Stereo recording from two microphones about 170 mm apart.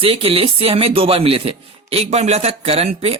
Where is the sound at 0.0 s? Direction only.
35° right (ahead or behind).